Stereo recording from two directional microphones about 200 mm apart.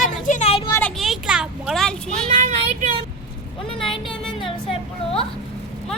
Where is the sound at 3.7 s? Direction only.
25° left (ahead or behind).